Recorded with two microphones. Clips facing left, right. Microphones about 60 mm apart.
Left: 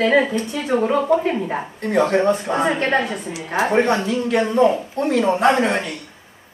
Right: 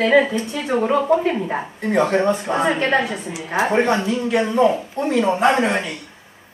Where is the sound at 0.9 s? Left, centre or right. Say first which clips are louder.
Right 2 dB; right.